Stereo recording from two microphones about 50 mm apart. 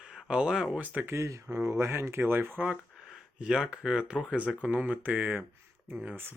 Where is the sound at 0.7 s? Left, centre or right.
Right.